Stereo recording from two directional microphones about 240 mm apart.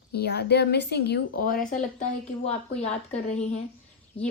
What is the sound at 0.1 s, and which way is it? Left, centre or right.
A woman's voice, left.